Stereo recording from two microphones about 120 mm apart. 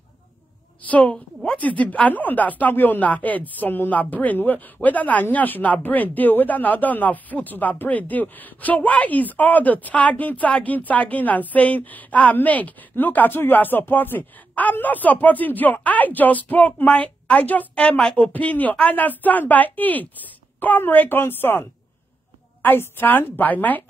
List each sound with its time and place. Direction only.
0.8 s a woman's voice: 10° left (ahead or behind)